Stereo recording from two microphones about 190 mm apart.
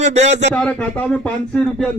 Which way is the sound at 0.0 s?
35° right (ahead or behind).